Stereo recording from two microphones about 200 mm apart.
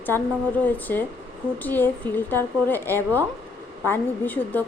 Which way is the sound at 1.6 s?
10° left (ahead or behind).